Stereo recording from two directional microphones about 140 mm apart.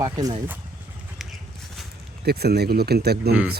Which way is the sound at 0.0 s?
25° right (ahead or behind).